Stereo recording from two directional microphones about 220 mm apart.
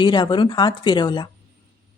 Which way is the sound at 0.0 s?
20° left (ahead or behind).